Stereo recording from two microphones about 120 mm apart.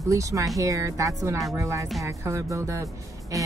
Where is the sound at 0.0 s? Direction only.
30° right (ahead or behind).